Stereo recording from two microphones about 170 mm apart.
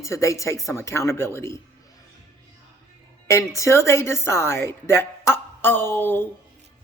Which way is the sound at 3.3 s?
15° left (ahead or behind).